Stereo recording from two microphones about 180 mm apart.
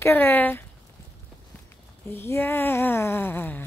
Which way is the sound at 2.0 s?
15° left (ahead or behind).